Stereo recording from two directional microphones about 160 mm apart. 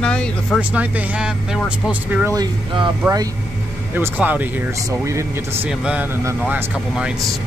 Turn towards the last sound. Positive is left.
turn(degrees=-10)  # may be behind; listen again after turning